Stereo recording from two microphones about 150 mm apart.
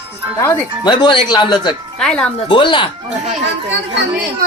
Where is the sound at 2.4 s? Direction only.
35° left (ahead or behind).